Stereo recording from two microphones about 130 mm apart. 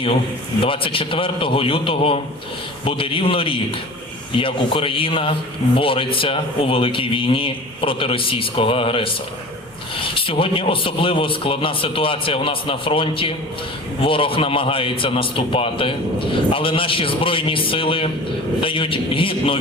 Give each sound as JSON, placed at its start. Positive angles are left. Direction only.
{"t": 0.6, "sound": "a man's voice", "side_deg": 40}
{"t": 10.2, "sound": "a man's voice", "side_deg": 45}